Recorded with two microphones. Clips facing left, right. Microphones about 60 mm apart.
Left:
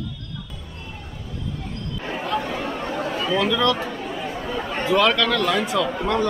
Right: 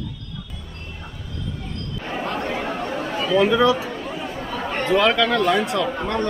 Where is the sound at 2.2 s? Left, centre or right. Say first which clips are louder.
Left 1 dB; right.